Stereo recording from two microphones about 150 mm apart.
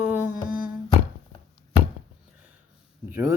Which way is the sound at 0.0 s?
10° right (ahead or behind).